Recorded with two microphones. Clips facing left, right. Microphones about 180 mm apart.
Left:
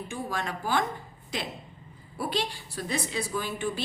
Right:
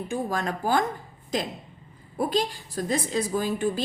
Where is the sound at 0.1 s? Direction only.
40° right (ahead or behind).